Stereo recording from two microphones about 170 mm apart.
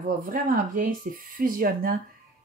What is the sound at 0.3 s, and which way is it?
Speech, 55° right (ahead or behind).